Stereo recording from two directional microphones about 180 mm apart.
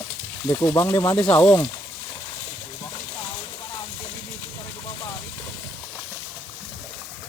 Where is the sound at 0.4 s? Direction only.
20° left (ahead or behind).